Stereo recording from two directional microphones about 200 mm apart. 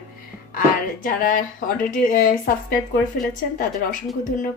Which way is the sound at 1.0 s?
40° left (ahead or behind).